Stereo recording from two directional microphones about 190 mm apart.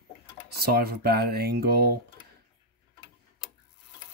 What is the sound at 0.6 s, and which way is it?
Speech, 50° right (ahead or behind).